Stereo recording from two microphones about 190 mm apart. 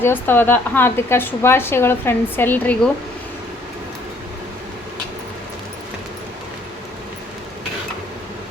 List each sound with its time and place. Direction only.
0.0 s a woman's voice: 10° left (ahead or behind)